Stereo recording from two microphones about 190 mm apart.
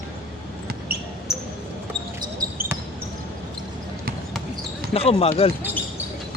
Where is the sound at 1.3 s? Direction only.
Centre (ahead or behind).